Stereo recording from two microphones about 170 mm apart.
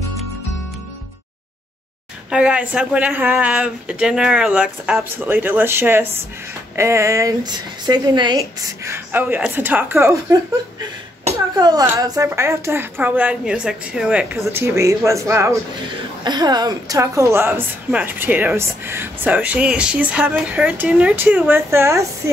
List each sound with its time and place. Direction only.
2.3 s a woman's voice: 5° right (ahead or behind)
11.5 s a woman's voice: 20° right (ahead or behind)